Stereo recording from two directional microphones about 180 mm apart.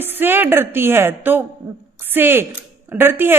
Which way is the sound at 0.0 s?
10° right (ahead or behind).